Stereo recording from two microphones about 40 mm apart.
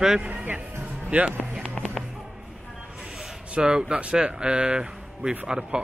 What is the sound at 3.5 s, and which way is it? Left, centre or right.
Speech, right.